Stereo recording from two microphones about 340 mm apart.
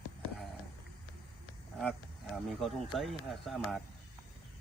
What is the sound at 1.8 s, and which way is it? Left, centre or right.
Speech, centre.